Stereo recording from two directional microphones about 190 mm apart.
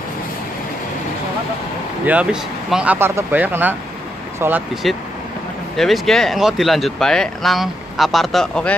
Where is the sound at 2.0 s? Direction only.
5° right (ahead or behind).